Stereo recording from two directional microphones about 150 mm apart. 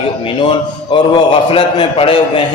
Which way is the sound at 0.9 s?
35° left (ahead or behind).